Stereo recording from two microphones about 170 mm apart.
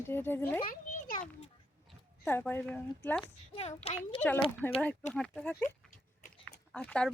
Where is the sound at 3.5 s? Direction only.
35° left (ahead or behind).